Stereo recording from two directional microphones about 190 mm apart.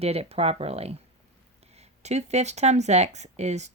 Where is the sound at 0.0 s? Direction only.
30° right (ahead or behind).